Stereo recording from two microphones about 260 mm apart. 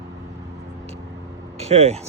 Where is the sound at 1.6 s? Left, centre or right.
Right.